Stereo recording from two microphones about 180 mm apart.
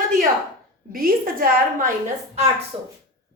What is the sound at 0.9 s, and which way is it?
Speech, 55° right (ahead or behind).